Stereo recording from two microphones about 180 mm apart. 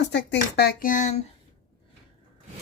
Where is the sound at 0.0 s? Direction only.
75° left (ahead or behind); by 1.3 s 40° left (ahead or behind).